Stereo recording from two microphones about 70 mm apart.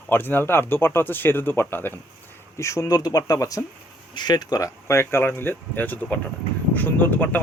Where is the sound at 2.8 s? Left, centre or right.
Left.